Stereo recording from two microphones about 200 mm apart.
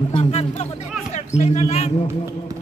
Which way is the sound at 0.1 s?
30° left (ahead or behind).